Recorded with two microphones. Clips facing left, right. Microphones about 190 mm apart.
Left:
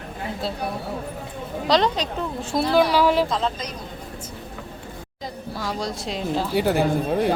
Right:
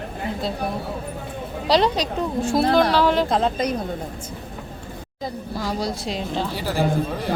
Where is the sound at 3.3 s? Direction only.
55° right (ahead or behind).